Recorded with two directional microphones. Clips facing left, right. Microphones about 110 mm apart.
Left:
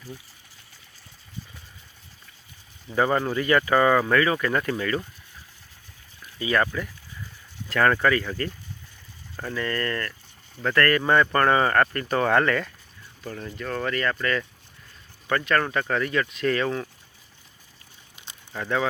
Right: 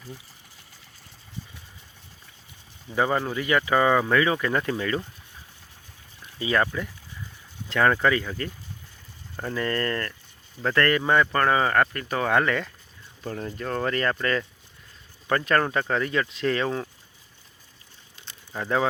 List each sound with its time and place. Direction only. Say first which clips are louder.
2.9 s speech: left 2 dB; 10° right (ahead or behind)
6.4 s speech: even; 20° right (ahead or behind)
9.3 s speech: right 1 dB; 20° right (ahead or behind)
11.0 s speech: left 1 dB; 10° right (ahead or behind)
13.2 s speech: right 2 dB; 30° right (ahead or behind)
18.2 s a sound: left 1 dB; 15° left (ahead or behind)